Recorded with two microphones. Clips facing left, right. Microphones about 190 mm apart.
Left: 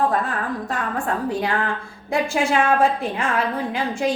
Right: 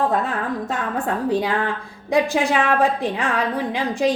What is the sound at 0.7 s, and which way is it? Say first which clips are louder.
A woman's voice: right 1 dB; 20° right (ahead or behind).